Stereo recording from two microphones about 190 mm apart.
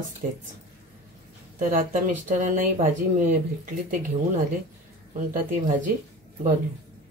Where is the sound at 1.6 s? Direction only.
45° right (ahead or behind).